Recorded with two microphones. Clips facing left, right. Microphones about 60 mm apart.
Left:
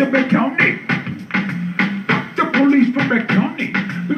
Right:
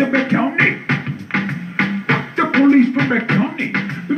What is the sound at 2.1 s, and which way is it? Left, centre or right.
Music, centre.